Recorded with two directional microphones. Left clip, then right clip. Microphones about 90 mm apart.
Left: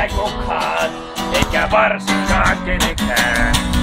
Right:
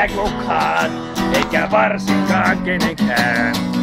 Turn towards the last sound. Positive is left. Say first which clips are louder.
# left 1 dB
turn(degrees=-65)  # may be behind; listen again after turning